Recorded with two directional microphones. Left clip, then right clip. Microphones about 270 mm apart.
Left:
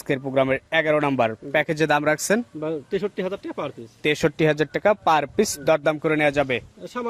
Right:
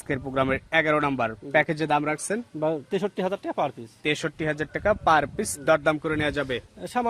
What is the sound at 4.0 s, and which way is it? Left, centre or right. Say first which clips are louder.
Speech: left 7 dB; centre.